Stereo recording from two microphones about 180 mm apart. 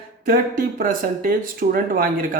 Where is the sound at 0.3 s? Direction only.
50° right (ahead or behind).